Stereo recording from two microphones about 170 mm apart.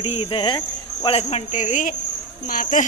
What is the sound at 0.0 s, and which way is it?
Cricket, 35° left (ahead or behind).